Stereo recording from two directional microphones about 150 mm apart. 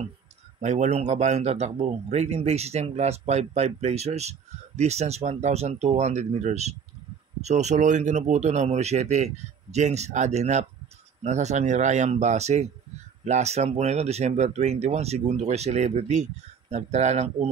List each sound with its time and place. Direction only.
0.6 s speech: 50° right (ahead or behind)